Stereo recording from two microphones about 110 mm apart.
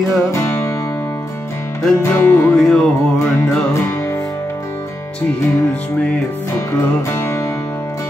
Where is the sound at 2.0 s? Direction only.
20° left (ahead or behind).